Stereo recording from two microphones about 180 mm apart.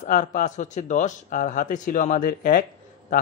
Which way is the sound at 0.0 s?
45° left (ahead or behind).